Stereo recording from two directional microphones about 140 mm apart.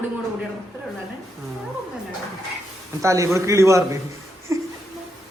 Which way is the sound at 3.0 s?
20° right (ahead or behind).